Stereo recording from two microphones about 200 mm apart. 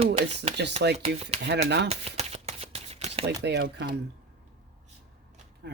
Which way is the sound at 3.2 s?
55° right (ahead or behind).